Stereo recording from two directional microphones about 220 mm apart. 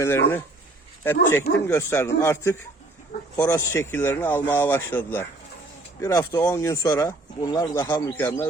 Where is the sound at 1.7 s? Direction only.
10° left (ahead or behind).